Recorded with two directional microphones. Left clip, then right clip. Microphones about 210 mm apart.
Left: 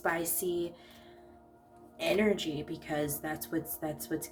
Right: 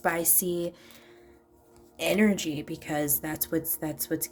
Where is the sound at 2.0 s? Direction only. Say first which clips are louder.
Right 3 dB; 45° right (ahead or behind).